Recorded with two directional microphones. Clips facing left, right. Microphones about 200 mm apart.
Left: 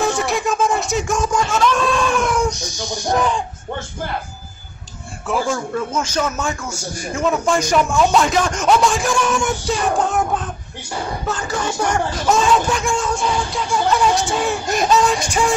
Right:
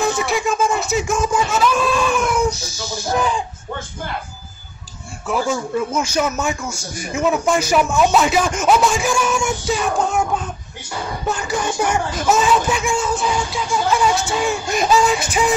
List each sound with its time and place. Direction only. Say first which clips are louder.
0.2 s a sound: even; centre (ahead or behind)
5.2 s a man's voice: even; centre (ahead or behind)
11.2 s speech: right 3 dB; 10° right (ahead or behind)